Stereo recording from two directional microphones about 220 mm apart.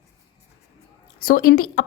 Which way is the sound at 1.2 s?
40° left (ahead or behind).